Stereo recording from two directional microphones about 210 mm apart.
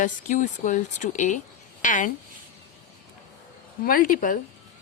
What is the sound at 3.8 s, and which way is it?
Speech, 40° left (ahead or behind).